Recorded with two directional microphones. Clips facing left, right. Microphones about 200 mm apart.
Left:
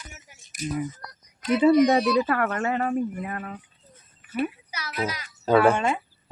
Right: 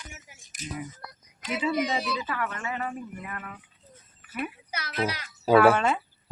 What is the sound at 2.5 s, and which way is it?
Speech, 45° left (ahead or behind).